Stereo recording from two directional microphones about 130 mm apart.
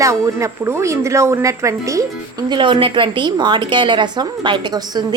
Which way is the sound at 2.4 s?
35° right (ahead or behind).